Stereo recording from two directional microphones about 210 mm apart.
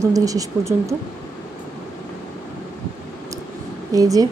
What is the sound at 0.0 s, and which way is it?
Speech, 15° right (ahead or behind).